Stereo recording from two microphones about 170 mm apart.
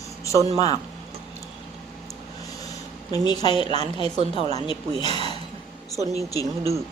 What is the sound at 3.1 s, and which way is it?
Speech, 25° left (ahead or behind).